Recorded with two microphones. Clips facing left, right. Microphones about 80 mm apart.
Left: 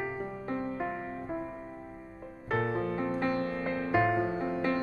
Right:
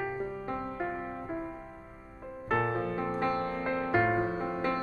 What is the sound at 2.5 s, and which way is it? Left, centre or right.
Music, right.